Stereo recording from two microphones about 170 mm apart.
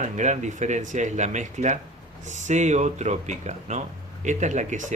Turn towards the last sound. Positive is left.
turn(degrees=-45)  # may be behind; listen again after turning